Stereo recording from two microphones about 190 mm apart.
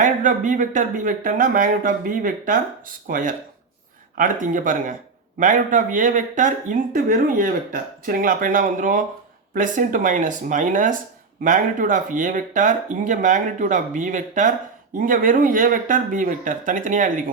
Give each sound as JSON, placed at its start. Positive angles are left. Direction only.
{"t": 0.0, "sound": "speech", "side_deg": -40}